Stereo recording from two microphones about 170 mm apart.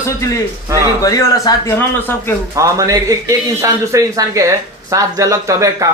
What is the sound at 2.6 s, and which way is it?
Speech, 20° right (ahead or behind).